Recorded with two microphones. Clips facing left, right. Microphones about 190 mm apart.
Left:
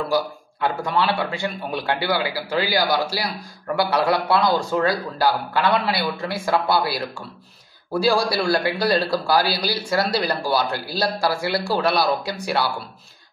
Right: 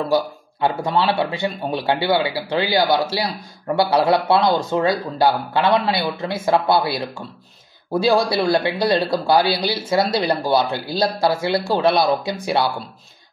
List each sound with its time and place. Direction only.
0.1 s a man's voice: 25° right (ahead or behind)